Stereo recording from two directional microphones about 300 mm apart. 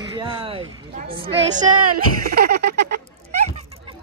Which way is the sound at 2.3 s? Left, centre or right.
Right.